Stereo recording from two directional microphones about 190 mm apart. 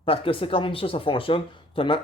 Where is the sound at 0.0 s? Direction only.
30° left (ahead or behind).